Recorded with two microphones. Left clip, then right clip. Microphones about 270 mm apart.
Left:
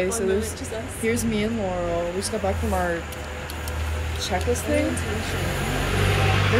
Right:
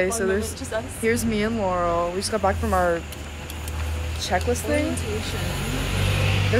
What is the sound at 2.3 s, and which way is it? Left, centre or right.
Speech, right.